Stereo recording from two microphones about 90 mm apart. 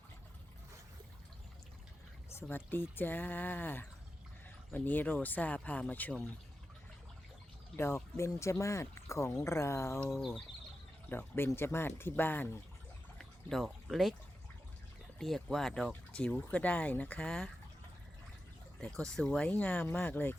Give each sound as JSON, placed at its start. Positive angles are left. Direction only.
{"t": 2.3, "sound": "speech", "side_deg": 20}
{"t": 7.8, "sound": "speech", "side_deg": 30}
{"t": 10.2, "sound": "speech", "side_deg": 0}
{"t": 11.1, "sound": "speech", "side_deg": 25}
{"t": 13.1, "sound": "pour", "side_deg": 0}
{"t": 15.2, "sound": "speech", "side_deg": 5}
{"t": 18.8, "sound": "speech", "side_deg": 10}